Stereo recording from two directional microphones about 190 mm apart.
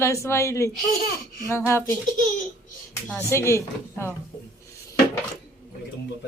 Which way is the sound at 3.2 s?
15° left (ahead or behind).